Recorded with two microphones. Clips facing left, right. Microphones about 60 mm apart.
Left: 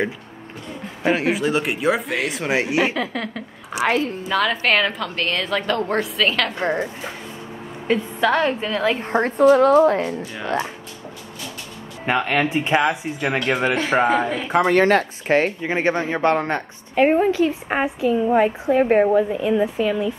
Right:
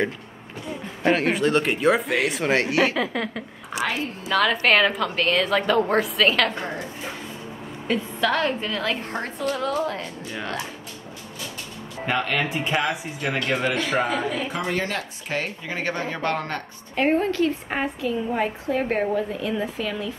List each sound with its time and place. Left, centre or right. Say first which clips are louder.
1.0 s a woman's voice: left 1 dB; centre
3.0 s a woman's voice: even; centre
3.7 s a woman's voice: left 6 dB; centre
7.9 s a woman's voice: left 4 dB; centre
9.0 s a woman's voice: left 12 dB; left
12.1 s a woman's voice: left 5 dB; left
14.5 s speech: left 11 dB; left
16.9 s a woman's voice: left 5 dB; centre